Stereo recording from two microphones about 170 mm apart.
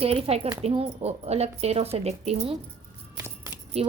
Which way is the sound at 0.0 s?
35° right (ahead or behind).